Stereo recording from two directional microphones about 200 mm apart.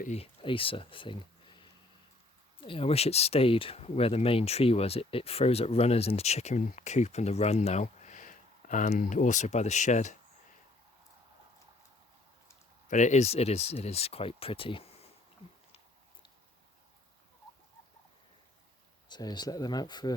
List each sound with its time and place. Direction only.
0.0 s speech: 30° left (ahead or behind)
12.9 s speech: 35° left (ahead or behind)
19.0 s speech: 20° left (ahead or behind)